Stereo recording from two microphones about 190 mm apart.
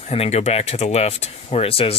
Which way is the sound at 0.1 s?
35° left (ahead or behind).